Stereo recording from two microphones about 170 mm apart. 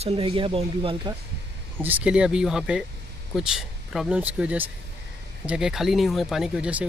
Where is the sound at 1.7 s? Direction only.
10° right (ahead or behind).